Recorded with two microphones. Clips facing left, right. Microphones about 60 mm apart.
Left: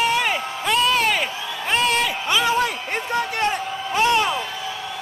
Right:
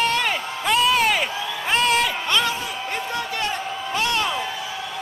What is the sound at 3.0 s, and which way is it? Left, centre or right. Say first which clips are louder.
Speech: left 6 dB; left.